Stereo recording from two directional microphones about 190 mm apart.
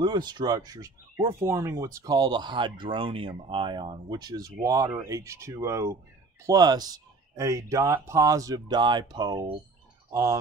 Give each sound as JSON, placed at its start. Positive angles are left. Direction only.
{"t": 0.0, "sound": "speech", "side_deg": -25}